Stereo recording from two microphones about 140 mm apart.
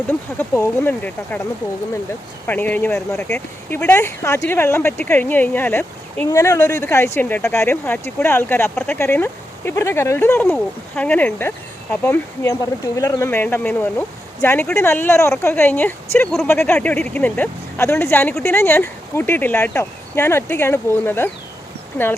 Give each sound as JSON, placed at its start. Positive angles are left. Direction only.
{"t": 0.1, "sound": "speech", "side_deg": 15}
{"t": 2.5, "sound": "speech", "side_deg": 10}